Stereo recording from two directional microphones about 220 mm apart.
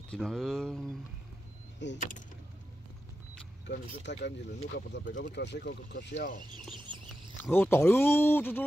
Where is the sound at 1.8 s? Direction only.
50° left (ahead or behind).